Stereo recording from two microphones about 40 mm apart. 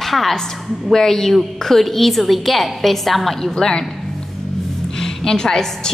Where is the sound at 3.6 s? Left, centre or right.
Centre.